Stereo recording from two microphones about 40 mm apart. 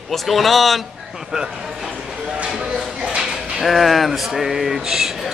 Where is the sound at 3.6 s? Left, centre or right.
Centre.